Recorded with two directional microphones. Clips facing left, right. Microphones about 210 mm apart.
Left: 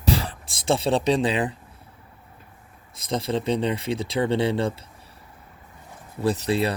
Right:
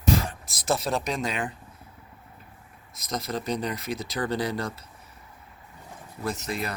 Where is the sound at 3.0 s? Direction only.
30° left (ahead or behind).